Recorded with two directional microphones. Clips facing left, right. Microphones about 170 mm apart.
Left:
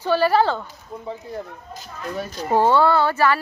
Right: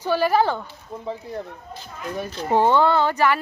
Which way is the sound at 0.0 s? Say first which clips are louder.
Left 2 dB; 15° right (ahead or behind).